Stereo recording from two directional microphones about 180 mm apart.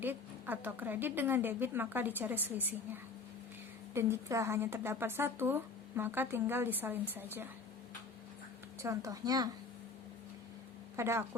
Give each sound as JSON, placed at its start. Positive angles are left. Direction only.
{"t": 0.0, "sound": "a woman's voice", "side_deg": -10}
{"t": 8.8, "sound": "speech", "side_deg": -15}
{"t": 10.9, "sound": "a woman's voice", "side_deg": -15}